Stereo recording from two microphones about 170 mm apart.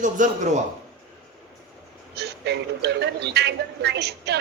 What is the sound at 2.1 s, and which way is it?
Speech, 75° right (ahead or behind).